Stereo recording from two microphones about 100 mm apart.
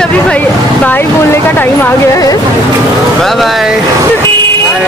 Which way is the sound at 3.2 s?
Centre (ahead or behind).